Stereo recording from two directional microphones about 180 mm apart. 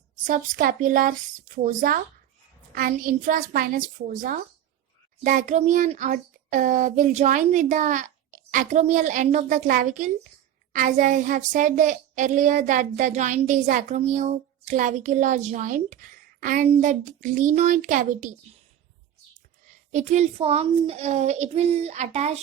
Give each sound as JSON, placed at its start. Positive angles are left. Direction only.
{"t": 0.3, "sound": "a child's voice", "side_deg": -50}
{"t": 19.9, "sound": "a child's voice", "side_deg": -40}